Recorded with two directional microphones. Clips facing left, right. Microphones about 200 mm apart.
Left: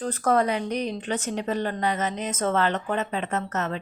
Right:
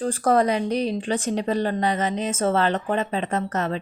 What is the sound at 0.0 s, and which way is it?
A woman's voice, 30° right (ahead or behind).